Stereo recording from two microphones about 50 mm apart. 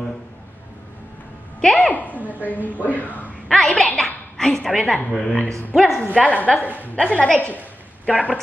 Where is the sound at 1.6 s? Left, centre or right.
Centre.